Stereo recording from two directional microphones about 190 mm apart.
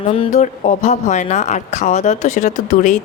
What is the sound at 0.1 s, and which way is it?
Speech, 35° left (ahead or behind).